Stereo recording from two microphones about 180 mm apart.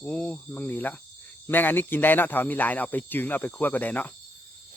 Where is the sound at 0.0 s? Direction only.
5° left (ahead or behind).